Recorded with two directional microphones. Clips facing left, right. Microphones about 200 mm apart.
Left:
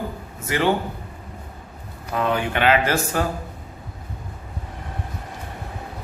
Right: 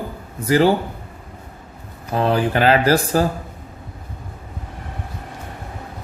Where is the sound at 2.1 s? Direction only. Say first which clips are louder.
Right 4 dB; 35° right (ahead or behind).